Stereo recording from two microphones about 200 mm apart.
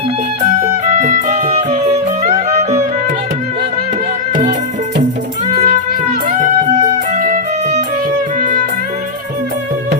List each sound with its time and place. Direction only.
0.6 s music: 35° right (ahead or behind)
5.6 s music: 40° right (ahead or behind)